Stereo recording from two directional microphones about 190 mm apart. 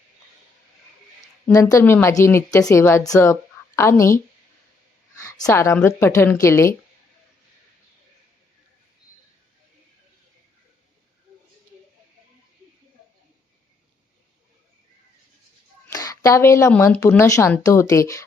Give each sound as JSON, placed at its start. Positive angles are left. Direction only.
{"t": 1.7, "sound": "a woman's voice", "side_deg": 15}
{"t": 5.2, "sound": "a woman's voice", "side_deg": 15}
{"t": 15.9, "sound": "a woman's voice", "side_deg": 20}